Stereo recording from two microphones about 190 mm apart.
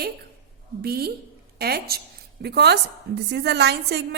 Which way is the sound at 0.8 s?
55° right (ahead or behind).